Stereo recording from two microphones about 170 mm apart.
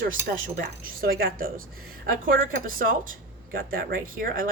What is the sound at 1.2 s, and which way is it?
Speech, 60° right (ahead or behind).